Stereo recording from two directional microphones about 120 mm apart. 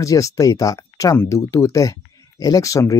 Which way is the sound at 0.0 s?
30° left (ahead or behind).